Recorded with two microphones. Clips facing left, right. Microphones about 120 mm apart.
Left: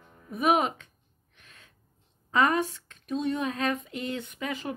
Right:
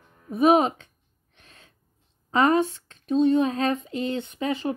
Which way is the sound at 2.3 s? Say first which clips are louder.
Right 4 dB; 30° right (ahead or behind).